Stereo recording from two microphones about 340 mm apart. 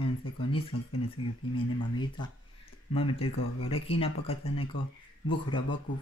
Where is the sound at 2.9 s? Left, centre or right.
Centre.